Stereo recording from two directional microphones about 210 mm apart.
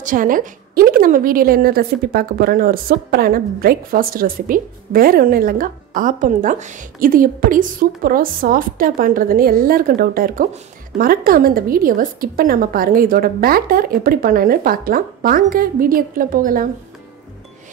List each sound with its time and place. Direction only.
0.0 s a woman's voice: 40° right (ahead or behind)